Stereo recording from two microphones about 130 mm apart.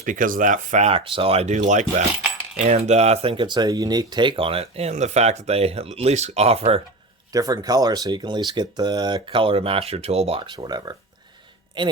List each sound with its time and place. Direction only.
0.0 s speech: 90° right
0.9 s speech: 45° right (ahead or behind); by 2.0 s 70° right (ahead or behind)
2.6 s speech: 60° right (ahead or behind)
7.3 s speech: 30° right (ahead or behind)